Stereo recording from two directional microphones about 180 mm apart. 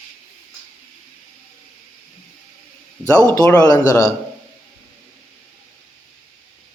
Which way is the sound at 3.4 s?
15° left (ahead or behind).